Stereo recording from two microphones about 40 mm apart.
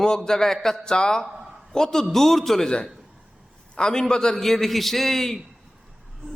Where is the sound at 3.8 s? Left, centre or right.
Centre.